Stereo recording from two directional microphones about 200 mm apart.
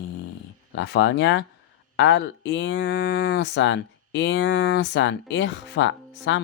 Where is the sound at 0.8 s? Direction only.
60° left (ahead or behind).